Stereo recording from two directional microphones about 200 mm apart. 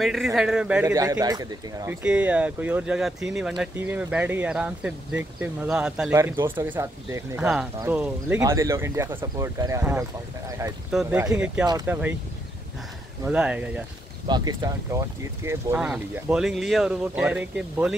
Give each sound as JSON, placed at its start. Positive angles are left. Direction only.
{"t": 0.0, "sound": "speech", "side_deg": 0}
{"t": 1.2, "sound": "speech", "side_deg": -20}
{"t": 2.0, "sound": "speech", "side_deg": -5}
{"t": 13.2, "sound": "speech", "side_deg": -5}
{"t": 14.2, "sound": "speech", "side_deg": -20}